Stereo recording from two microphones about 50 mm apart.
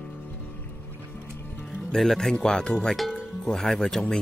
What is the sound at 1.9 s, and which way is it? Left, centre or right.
Speech, centre.